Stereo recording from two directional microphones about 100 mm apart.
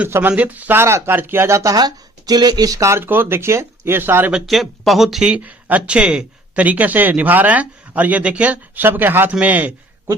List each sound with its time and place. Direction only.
0.1 s speech: 15° right (ahead or behind)
4.4 s speech: centre (ahead or behind); by 9.7 s 15° right (ahead or behind)